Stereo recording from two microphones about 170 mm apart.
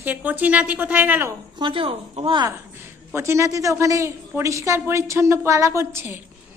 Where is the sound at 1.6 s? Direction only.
30° right (ahead or behind).